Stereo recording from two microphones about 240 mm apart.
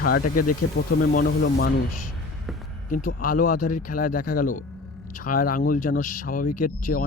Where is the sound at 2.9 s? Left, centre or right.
Left.